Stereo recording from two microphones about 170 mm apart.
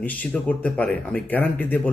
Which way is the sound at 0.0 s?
10° left (ahead or behind).